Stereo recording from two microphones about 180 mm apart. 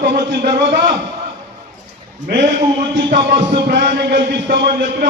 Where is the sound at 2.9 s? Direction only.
75° right (ahead or behind).